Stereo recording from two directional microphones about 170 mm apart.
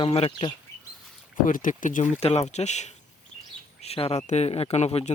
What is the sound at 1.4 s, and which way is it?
Speech, 50° left (ahead or behind).